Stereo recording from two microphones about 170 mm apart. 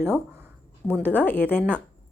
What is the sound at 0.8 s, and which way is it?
Speech, 10° left (ahead or behind).